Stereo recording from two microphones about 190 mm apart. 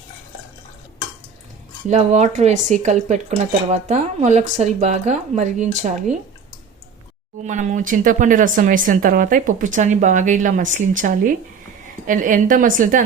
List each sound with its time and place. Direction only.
1.9 s speech: 35° right (ahead or behind)
7.4 s a woman's voice: 40° right (ahead or behind)